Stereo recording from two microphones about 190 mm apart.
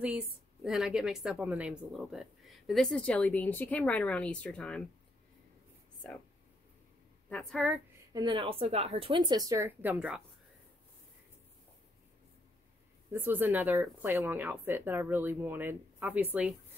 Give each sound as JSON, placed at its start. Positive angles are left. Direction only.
{"t": 0.7, "sound": "speech", "side_deg": -5}
{"t": 7.2, "sound": "speech", "side_deg": 5}
{"t": 8.1, "sound": "speech", "side_deg": -25}
{"t": 13.1, "sound": "speech", "side_deg": -10}